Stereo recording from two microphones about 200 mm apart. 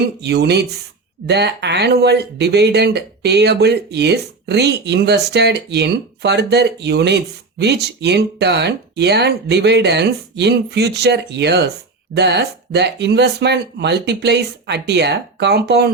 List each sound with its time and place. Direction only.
0.0 s speech: 55° right (ahead or behind)